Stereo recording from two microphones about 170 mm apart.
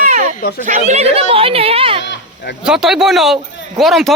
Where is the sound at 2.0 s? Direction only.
90° left.